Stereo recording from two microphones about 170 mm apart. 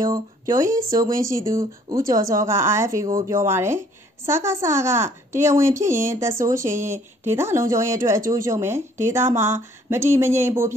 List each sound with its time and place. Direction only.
0.0 s a woman's voice: 20° right (ahead or behind)